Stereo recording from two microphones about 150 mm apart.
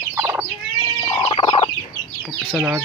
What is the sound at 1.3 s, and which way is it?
Chicken, 35° left (ahead or behind).